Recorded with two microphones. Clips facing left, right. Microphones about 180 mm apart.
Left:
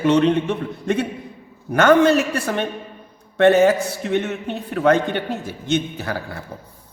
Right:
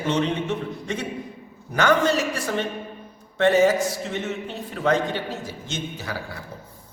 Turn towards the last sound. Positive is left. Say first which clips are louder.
# left 5 dB
turn(degrees=55)  # may be behind; listen again after turning